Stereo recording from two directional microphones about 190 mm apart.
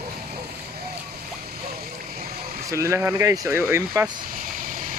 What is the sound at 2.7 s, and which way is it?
Speech, 15° right (ahead or behind).